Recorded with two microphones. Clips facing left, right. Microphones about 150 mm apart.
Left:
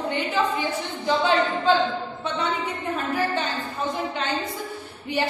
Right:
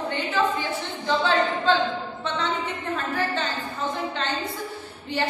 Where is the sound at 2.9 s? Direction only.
10° left (ahead or behind).